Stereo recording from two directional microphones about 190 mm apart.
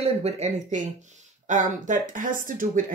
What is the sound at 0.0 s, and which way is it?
Speech, 35° right (ahead or behind).